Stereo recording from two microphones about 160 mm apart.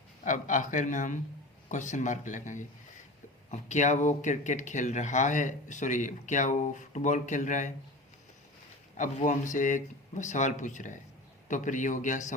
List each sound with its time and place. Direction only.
0.3 s speech: 50° left (ahead or behind)
9.0 s speech: 50° left (ahead or behind)